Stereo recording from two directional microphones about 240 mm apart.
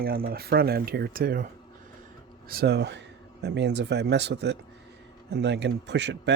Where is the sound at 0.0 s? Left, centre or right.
Right.